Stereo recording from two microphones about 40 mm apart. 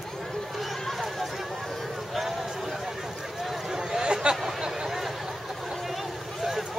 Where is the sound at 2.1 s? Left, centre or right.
Centre; by 4.4 s right.